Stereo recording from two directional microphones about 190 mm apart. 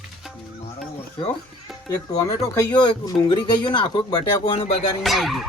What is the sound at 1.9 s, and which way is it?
Speech, 15° left (ahead or behind).